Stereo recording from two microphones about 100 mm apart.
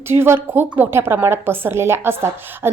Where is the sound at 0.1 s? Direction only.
25° right (ahead or behind).